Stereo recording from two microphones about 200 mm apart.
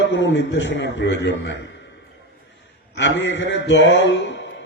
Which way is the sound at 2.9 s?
60° left (ahead or behind).